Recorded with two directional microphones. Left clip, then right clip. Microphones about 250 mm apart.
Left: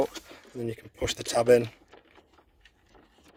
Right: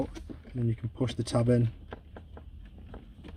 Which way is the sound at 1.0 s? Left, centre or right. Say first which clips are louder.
Left 6 dB; left.